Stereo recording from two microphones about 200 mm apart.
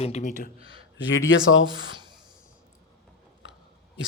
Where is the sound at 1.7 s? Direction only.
20° right (ahead or behind).